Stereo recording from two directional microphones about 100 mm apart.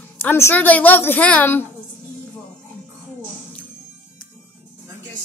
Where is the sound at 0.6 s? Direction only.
15° left (ahead or behind).